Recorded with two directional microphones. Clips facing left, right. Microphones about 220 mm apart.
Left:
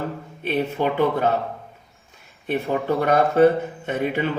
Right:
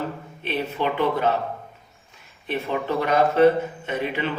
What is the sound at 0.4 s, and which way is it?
Speech, 45° left (ahead or behind).